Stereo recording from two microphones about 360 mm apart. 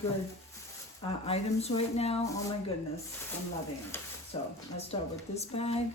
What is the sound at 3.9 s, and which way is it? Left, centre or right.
Speech, centre.